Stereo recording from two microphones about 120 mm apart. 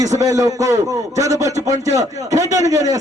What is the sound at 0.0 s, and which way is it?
A man's voice, 30° right (ahead or behind).